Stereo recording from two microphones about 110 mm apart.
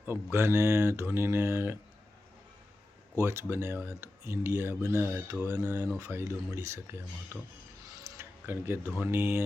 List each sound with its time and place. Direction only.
0.0 s speech: 20° right (ahead or behind)
3.2 s speech: 25° right (ahead or behind)
7.9 s a sound: 25° right (ahead or behind)
9.0 s speech: 20° right (ahead or behind)